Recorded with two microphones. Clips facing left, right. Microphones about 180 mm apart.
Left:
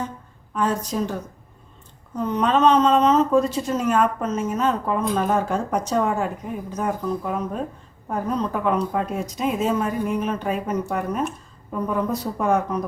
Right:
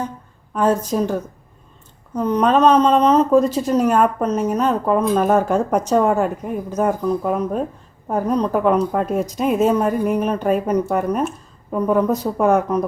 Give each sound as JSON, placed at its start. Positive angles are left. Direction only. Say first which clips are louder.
{"t": 0.5, "sound": "speech", "louder": "right 6 dB", "side_deg": -45}
{"t": 2.1, "sound": "speech", "louder": "right 4 dB", "side_deg": -40}